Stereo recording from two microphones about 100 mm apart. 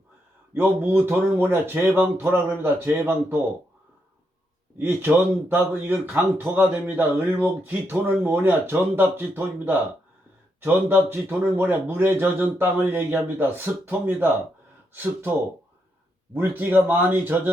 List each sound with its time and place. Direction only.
0.5 s speech: 20° right (ahead or behind)
4.8 s speech: 20° right (ahead or behind)
16.3 s speech: 20° right (ahead or behind)